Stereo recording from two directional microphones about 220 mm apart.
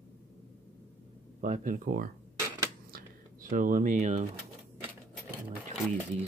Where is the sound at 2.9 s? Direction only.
35° right (ahead or behind).